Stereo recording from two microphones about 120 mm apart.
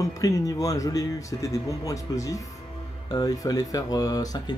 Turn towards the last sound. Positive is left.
turn(degrees=30)  # may be behind; listen again after turning